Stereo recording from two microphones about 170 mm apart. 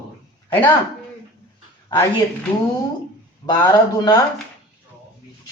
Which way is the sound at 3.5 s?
25° left (ahead or behind).